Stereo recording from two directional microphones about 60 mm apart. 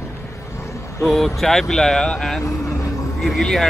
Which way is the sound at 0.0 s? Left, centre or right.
Left.